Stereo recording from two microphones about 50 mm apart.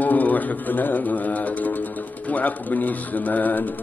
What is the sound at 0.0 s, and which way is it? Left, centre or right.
Speech, left.